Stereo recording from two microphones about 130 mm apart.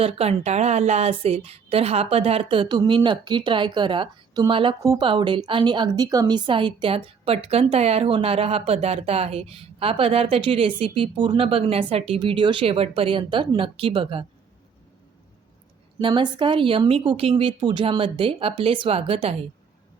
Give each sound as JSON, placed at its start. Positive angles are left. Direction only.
{"t": 0.0, "sound": "a woman's voice", "side_deg": -50}
{"t": 16.0, "sound": "a woman's voice", "side_deg": -40}